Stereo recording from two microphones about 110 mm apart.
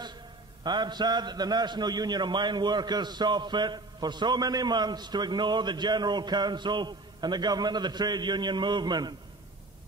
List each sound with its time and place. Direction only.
0.7 s a man's voice: 40° right (ahead or behind)